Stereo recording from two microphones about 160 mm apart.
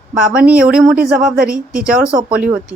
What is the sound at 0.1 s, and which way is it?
A woman's voice, 5° right (ahead or behind).